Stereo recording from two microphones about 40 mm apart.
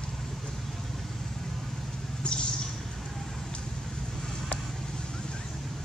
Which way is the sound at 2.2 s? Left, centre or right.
Left.